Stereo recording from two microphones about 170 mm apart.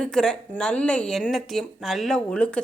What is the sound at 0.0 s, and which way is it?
A woman's voice, 5° left (ahead or behind).